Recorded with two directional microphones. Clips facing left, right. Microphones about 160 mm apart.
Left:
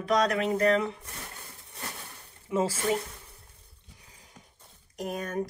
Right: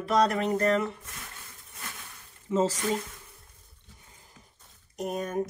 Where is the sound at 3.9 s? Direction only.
Centre (ahead or behind).